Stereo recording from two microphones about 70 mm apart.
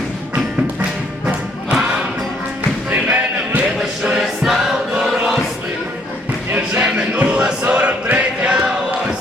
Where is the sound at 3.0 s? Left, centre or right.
Centre.